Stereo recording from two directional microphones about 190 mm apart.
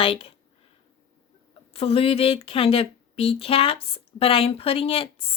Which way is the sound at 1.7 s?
30° left (ahead or behind).